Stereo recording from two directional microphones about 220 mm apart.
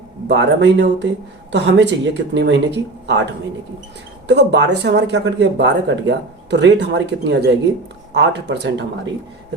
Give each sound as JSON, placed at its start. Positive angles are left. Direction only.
{"t": 0.3, "sound": "speech", "side_deg": -50}
{"t": 4.3, "sound": "speech", "side_deg": -50}